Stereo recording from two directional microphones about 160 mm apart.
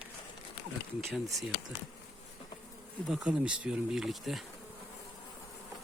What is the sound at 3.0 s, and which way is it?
Speech, 5° right (ahead or behind).